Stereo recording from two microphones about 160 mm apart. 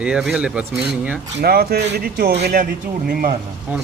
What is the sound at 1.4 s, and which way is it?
Speech, 75° right (ahead or behind).